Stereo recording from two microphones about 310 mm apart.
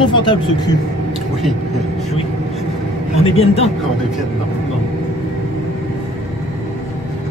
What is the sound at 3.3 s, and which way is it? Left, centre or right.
Speech, centre.